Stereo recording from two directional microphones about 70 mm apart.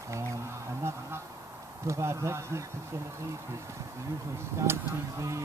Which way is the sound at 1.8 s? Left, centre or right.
Right.